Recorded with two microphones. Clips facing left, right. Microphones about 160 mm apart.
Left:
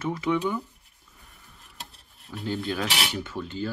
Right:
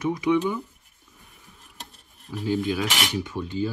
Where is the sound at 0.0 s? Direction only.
15° right (ahead or behind).